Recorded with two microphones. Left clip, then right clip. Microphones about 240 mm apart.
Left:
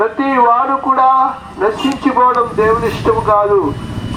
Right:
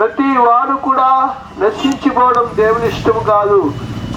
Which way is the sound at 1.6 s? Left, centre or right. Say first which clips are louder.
Even; right.